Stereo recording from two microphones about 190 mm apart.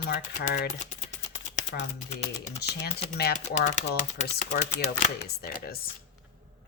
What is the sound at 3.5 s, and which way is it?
Speech, 40° left (ahead or behind).